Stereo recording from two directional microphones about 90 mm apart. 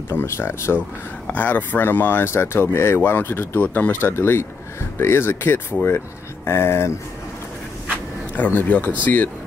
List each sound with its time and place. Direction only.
0.1 s speech: 25° left (ahead or behind)
1.3 s speech: 20° left (ahead or behind)
8.4 s speech: 20° left (ahead or behind)